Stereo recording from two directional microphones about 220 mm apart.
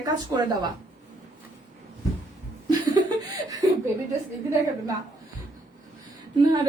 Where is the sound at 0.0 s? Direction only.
20° right (ahead or behind).